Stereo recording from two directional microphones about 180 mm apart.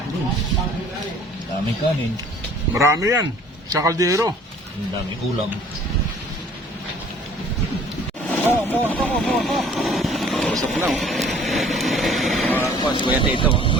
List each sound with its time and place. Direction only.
2.7 s speech: 15° right (ahead or behind)
8.3 s vehicle: 10° left (ahead or behind)
12.5 s speech: 10° left (ahead or behind)
12.8 s speech: 25° left (ahead or behind)